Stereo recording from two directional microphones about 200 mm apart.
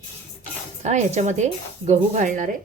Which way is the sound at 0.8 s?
35° right (ahead or behind).